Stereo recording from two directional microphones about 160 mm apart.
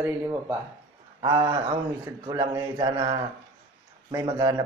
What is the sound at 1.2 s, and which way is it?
Speech, 25° right (ahead or behind).